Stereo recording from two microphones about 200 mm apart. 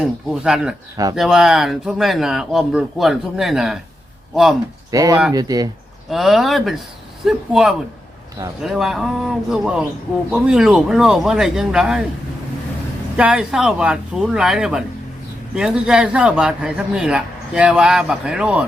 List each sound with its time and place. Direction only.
0.0 s a man's voice: 5° right (ahead or behind)
4.9 s speech: 15° right (ahead or behind)
6.1 s a man's voice: centre (ahead or behind)
13.1 s a man's voice: 5° right (ahead or behind)